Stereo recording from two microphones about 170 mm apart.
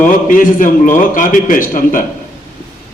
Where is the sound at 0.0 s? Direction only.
50° left (ahead or behind).